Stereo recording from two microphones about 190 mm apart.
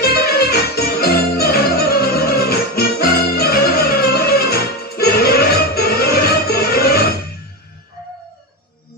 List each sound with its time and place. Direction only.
0.0 s music: 55° left (ahead or behind)